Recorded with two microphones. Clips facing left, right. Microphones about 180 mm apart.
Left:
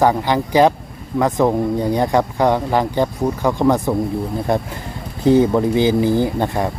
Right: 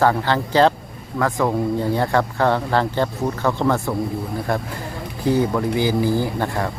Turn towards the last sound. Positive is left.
turn(degrees=20)  # may be behind; listen again after turning